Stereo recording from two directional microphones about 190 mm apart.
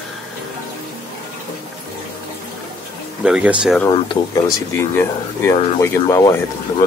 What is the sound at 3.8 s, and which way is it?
Speech, 20° left (ahead or behind).